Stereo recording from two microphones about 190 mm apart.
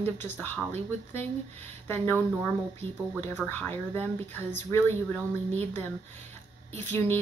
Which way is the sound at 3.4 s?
10° left (ahead or behind).